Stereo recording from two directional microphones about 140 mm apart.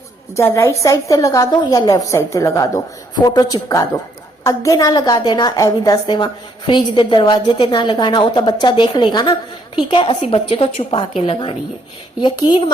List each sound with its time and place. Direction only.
0.3 s a woman's voice: 20° left (ahead or behind); by 12.7 s 35° left (ahead or behind)